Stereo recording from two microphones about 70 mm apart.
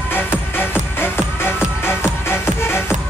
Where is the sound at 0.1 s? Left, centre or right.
Left.